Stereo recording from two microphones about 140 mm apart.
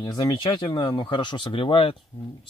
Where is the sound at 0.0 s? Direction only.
30° left (ahead or behind).